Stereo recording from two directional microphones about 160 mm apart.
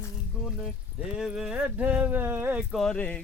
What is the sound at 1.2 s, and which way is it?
Speech, 5° right (ahead or behind).